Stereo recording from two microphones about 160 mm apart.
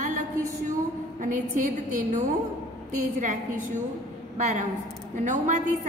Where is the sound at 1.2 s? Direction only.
55° right (ahead or behind).